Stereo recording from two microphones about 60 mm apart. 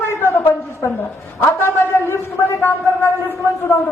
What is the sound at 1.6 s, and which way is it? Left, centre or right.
A man's voice, left.